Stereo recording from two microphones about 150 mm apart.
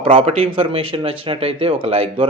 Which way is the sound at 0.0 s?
40° right (ahead or behind).